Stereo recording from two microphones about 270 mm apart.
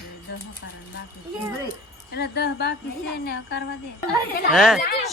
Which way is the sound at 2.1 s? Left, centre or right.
Left.